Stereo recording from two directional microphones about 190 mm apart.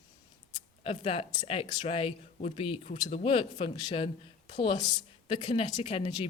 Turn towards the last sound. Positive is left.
turn(degrees=30)  # may be behind; listen again after turning